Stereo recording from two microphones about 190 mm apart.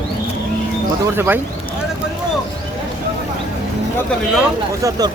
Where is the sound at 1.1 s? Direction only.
10° right (ahead or behind).